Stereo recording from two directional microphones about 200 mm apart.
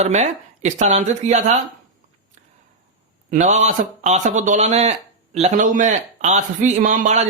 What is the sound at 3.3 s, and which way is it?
A man's voice, 35° right (ahead or behind).